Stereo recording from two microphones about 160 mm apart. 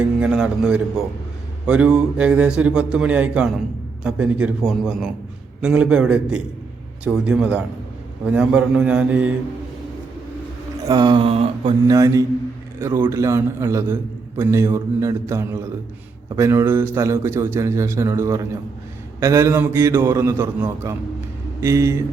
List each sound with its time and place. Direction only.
0.0 s a man's voice: 5° right (ahead or behind)
10.8 s mantra: 25° right (ahead or behind)
11.9 s mantra: 20° right (ahead or behind)
12.8 s a man's voice: 15° right (ahead or behind)